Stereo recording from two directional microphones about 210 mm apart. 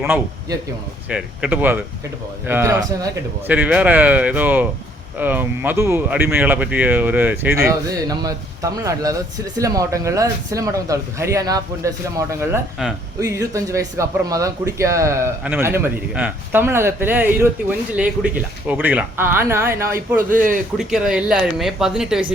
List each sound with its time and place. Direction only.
0.0 s a man's voice: 10° right (ahead or behind)
12.8 s speech: centre (ahead or behind)
13.1 s speech: 15° right (ahead or behind)
20.3 s a man's voice: 40° right (ahead or behind)
20.7 s speech: 5° right (ahead or behind)